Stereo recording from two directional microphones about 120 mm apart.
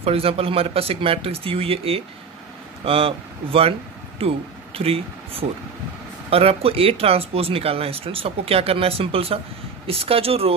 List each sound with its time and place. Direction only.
0.0 s speech: 55° right (ahead or behind)